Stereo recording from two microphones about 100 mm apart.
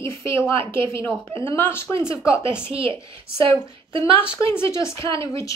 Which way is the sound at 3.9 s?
55° right (ahead or behind).